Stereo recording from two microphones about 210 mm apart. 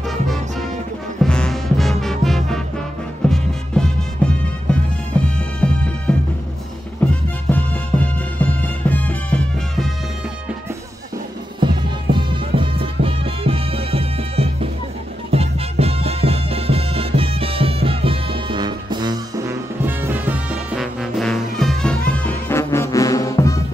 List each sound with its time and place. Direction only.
1.2 s music: 5° left (ahead or behind)
11.6 s music: 25° right (ahead or behind); by 23.6 s 15° left (ahead or behind)